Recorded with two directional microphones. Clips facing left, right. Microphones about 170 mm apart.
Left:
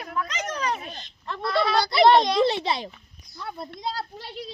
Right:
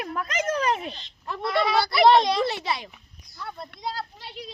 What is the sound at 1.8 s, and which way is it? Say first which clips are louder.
Speech: left 2 dB; 25° left (ahead or behind).